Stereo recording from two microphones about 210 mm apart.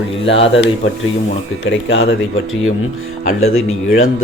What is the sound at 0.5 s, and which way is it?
Speech, 60° left (ahead or behind).